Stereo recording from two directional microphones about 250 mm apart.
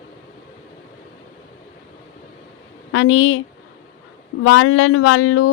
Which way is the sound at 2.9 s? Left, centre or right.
Left.